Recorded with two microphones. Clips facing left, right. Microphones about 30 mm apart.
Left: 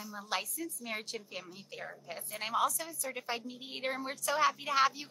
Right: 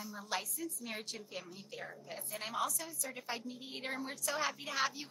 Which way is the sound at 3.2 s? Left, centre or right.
Centre.